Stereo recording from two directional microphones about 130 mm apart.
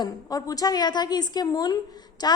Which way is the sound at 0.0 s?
30° left (ahead or behind).